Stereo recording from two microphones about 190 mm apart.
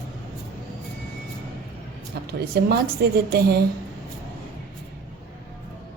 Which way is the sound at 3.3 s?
55° right (ahead or behind).